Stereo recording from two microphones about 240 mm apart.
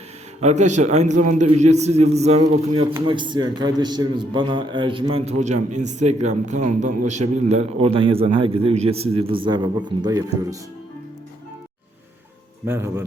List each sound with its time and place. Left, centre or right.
0.4 s a man's voice: right
12.6 s speech: centre